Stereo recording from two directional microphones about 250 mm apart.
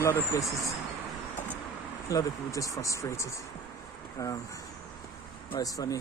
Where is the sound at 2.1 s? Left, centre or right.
Centre.